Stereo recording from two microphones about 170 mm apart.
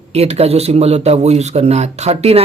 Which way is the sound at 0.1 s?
40° right (ahead or behind).